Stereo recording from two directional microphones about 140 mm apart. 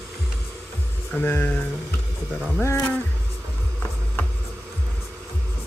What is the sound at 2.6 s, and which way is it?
Speech, 20° left (ahead or behind).